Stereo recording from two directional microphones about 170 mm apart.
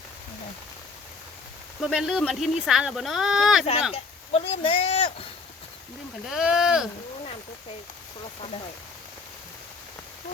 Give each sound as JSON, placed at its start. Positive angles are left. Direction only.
{"t": 1.8, "sound": "speech", "side_deg": 0}
{"t": 3.9, "sound": "speech", "side_deg": 35}
{"t": 6.3, "sound": "speech", "side_deg": -5}